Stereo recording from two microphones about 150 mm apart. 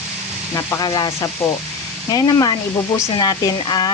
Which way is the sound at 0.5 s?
25° left (ahead or behind).